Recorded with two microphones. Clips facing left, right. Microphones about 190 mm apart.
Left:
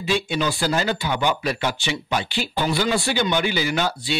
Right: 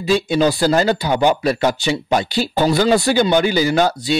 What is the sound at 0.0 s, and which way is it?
Speech, 40° right (ahead or behind).